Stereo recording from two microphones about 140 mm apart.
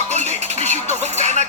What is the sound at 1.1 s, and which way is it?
Speech, 55° right (ahead or behind).